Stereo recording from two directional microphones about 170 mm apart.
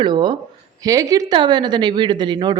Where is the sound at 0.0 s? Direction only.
25° right (ahead or behind).